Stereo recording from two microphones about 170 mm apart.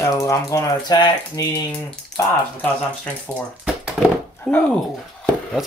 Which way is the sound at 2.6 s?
10° left (ahead or behind).